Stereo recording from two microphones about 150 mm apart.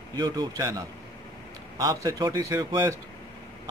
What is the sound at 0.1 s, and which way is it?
Speech, 25° right (ahead or behind).